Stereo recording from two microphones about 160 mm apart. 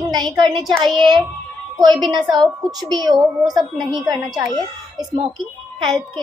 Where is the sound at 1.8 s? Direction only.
25° right (ahead or behind).